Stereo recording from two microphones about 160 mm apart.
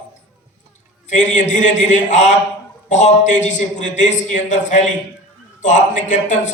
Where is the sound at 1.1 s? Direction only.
50° left (ahead or behind).